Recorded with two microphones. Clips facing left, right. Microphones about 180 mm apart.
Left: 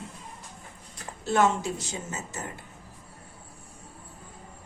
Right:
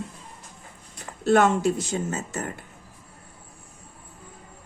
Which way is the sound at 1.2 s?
60° right (ahead or behind).